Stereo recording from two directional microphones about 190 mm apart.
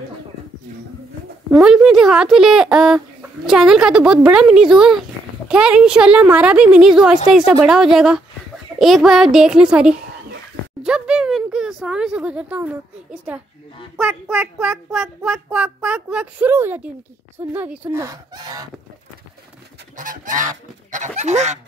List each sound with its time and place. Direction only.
1.5 s speech: 5° right (ahead or behind)
10.8 s a sound: 5° right (ahead or behind)
13.9 s a child's voice: 5° right (ahead or behind)
20.0 s goose: 45° right (ahead or behind)